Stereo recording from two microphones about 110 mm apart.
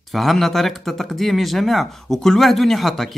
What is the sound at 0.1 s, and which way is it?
Speech, centre (ahead or behind).